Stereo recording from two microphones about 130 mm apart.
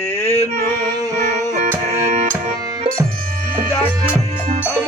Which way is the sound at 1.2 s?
90° right.